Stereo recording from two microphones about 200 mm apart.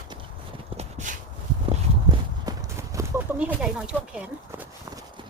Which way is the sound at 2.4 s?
15° right (ahead or behind).